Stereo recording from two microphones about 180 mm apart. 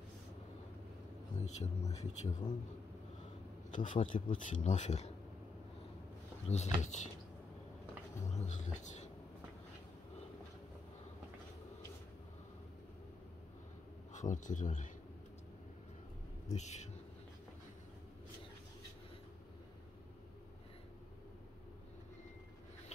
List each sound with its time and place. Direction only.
1.4 s a man's voice: 40° left (ahead or behind)
3.7 s a man's voice: 45° left (ahead or behind)
6.4 s a man's voice: 40° left (ahead or behind)
8.3 s a man's voice: 40° left (ahead or behind)
14.1 s speech: 45° left (ahead or behind)
16.5 s a man's voice: 40° left (ahead or behind)